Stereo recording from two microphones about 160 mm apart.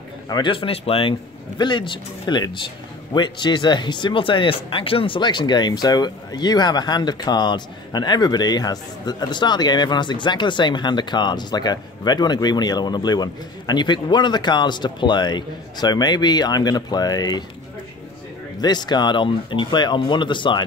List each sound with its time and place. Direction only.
0.3 s speech: 30° left (ahead or behind)
18.6 s speech: 25° left (ahead or behind)